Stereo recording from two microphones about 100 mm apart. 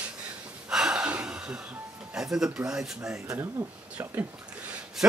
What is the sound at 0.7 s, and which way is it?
Music, 5° right (ahead or behind).